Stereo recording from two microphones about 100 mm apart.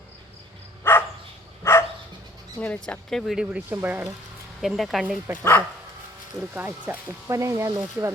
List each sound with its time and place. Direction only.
0.9 s dog: 25° left (ahead or behind)
2.6 s speech: 10° left (ahead or behind)
3.5 s speech: 20° right (ahead or behind)
4.8 s speech: centre (ahead or behind)
5.4 s speech: 20° left (ahead or behind)
6.5 s speech: 20° right (ahead or behind)
7.3 s speech: 30° right (ahead or behind)